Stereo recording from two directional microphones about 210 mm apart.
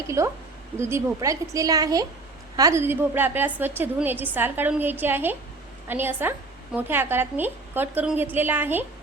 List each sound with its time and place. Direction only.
0.2 s a woman's voice: 15° right (ahead or behind)